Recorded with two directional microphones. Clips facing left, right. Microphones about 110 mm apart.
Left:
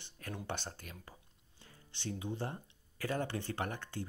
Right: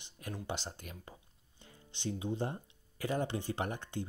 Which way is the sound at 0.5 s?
15° right (ahead or behind).